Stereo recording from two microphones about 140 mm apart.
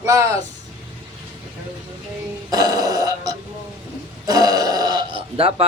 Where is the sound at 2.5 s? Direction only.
25° right (ahead or behind).